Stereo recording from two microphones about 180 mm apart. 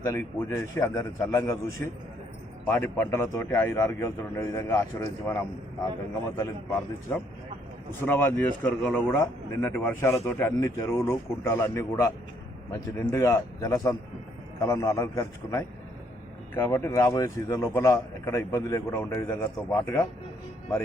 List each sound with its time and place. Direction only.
0.0 s a man's voice: 15° left (ahead or behind)
2.6 s a man's voice: 10° left (ahead or behind)